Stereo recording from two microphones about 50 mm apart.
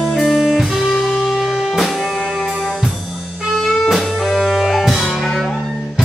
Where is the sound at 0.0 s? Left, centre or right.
Centre.